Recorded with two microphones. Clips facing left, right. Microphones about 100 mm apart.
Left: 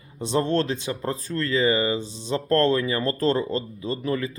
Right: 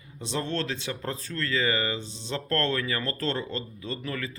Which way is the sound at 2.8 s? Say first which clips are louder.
Left 7 dB; 30° left (ahead or behind).